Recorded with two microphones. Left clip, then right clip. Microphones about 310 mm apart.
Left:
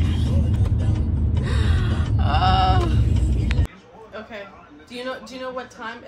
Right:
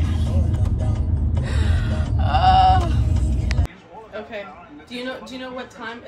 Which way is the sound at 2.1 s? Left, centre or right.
Centre.